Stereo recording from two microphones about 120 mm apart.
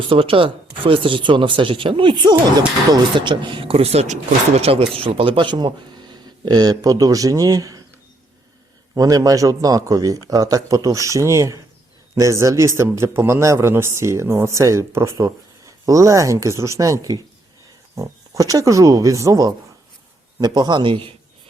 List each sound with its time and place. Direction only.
0.1 s speech: 45° right (ahead or behind); by 7.8 s 30° right (ahead or behind)
9.0 s a man's voice: 30° right (ahead or behind); by 21.1 s 45° right (ahead or behind)